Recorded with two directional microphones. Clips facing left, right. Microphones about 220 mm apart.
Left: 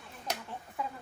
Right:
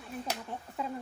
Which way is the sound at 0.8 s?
25° right (ahead or behind).